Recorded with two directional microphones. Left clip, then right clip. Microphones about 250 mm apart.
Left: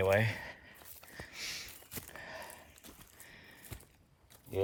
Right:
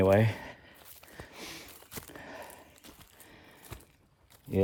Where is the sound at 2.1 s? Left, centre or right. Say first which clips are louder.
Even; right.